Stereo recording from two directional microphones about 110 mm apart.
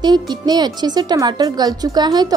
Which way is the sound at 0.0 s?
40° right (ahead or behind).